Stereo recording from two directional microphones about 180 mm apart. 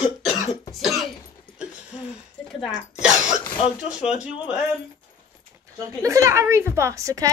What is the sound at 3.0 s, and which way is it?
Cough, 5° right (ahead or behind).